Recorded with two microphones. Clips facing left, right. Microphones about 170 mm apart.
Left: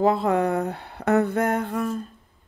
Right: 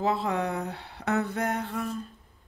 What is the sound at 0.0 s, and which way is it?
Speech, 50° left (ahead or behind).